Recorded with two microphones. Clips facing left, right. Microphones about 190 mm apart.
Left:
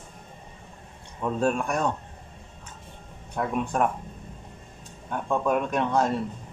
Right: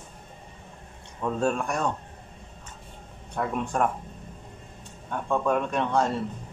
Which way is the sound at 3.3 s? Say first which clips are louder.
Left 1 dB; centre (ahead or behind).